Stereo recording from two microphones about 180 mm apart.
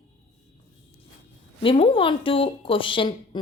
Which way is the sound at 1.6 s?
30° left (ahead or behind).